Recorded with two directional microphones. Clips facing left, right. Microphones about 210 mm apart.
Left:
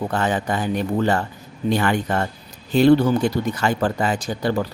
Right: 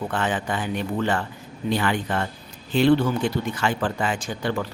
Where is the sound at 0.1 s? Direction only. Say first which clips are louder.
Left 3 dB; 40° left (ahead or behind).